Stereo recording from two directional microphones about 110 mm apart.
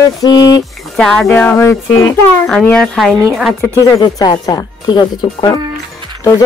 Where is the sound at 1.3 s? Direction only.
20° left (ahead or behind).